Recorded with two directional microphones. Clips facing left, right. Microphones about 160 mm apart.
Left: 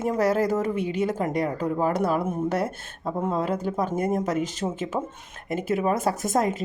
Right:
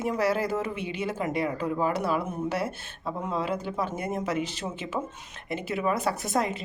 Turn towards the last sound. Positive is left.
turn(degrees=45)  # may be behind; listen again after turning